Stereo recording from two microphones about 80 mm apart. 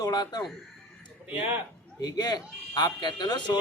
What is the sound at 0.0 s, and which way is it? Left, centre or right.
Speech, left.